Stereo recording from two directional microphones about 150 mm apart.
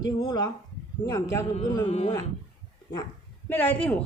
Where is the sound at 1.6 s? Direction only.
25° left (ahead or behind).